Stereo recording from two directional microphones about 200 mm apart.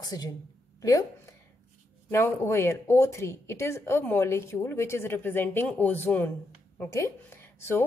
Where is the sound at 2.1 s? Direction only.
15° left (ahead or behind).